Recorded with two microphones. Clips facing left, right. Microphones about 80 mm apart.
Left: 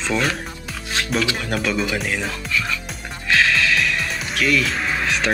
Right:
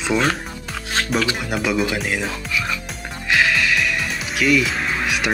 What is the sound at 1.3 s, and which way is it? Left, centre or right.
Speech, centre.